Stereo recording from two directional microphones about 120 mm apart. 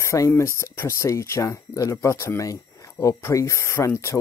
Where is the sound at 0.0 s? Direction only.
25° left (ahead or behind).